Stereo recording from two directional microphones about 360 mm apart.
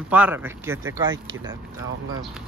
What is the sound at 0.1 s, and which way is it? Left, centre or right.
Speech, centre.